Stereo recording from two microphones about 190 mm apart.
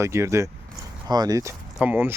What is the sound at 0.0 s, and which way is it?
Speech, 15° right (ahead or behind).